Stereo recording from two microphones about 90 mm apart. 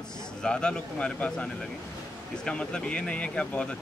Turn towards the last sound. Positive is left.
turn(degrees=10)  # may be behind; listen again after turning